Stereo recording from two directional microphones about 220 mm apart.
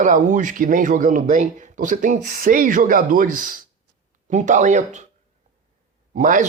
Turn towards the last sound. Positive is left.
turn(degrees=-35)  # may be behind; listen again after turning